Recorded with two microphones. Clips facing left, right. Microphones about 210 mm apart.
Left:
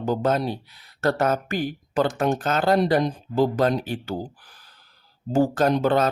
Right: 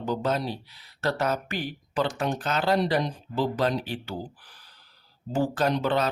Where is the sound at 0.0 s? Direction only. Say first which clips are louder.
Left 5 dB; 50° left (ahead or behind).